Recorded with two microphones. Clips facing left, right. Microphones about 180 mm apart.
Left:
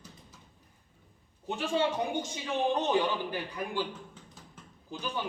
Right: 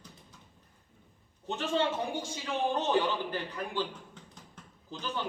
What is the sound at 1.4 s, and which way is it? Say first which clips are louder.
Speech: left 1 dB; 10° left (ahead or behind).